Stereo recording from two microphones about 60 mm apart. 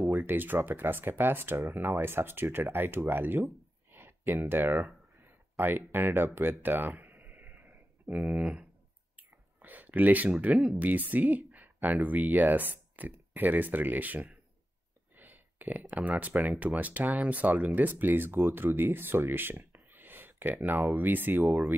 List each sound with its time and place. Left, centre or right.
0.1 s speech: right
3.9 s a sound: right
5.8 s speech: right
6.6 s a sound: right
9.1 s whispering: right
10.7 s speech: right